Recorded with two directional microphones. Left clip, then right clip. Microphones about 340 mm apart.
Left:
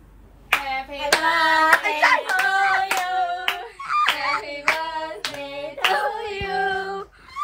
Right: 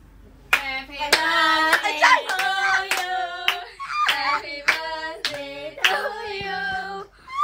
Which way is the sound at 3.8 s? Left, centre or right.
Centre.